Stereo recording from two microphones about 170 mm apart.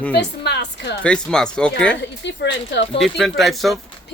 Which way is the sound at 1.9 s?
90° left.